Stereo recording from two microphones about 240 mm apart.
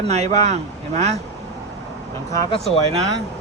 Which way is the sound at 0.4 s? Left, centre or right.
Right.